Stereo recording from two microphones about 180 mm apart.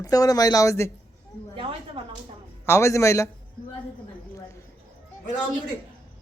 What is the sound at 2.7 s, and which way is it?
Speech, 15° left (ahead or behind).